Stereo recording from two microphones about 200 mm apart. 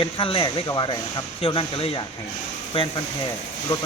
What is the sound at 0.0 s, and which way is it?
Speech, 25° left (ahead or behind).